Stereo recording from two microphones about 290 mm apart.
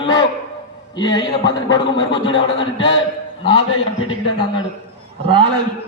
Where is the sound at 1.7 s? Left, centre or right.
Left.